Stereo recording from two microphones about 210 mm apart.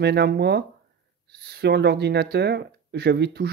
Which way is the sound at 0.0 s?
50° right (ahead or behind).